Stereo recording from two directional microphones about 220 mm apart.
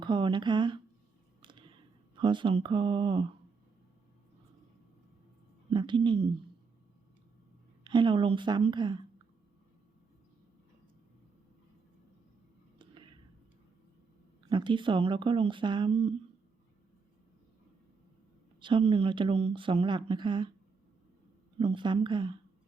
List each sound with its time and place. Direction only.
0.0 s speech: 20° right (ahead or behind)
1.4 s a sound: 20° right (ahead or behind)
2.1 s speech: 20° right (ahead or behind)
5.7 s speech: 20° right (ahead or behind)
7.9 s speech: 20° right (ahead or behind)
12.8 s a sound: 20° right (ahead or behind)
14.5 s speech: 20° right (ahead or behind)
18.6 s speech: 25° right (ahead or behind)
21.6 s speech: 20° right (ahead or behind)